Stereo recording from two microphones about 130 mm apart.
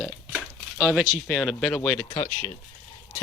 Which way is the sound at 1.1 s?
Centre (ahead or behind).